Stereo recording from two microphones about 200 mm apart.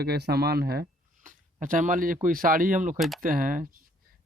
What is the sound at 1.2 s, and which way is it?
Speech, 40° right (ahead or behind).